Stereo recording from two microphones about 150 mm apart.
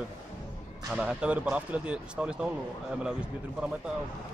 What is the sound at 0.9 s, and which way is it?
Speech, 5° right (ahead or behind).